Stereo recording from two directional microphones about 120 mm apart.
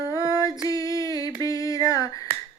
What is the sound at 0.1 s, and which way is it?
Female singing, 30° left (ahead or behind).